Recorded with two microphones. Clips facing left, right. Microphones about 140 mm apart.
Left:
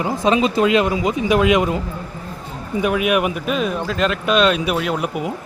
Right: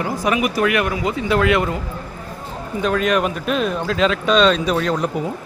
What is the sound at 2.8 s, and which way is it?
Speech, 10° left (ahead or behind).